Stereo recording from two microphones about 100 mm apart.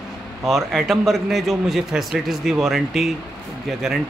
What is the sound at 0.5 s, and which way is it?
Speech, centre (ahead or behind).